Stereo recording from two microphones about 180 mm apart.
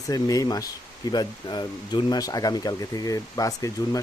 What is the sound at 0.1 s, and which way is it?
Speech, 20° left (ahead or behind).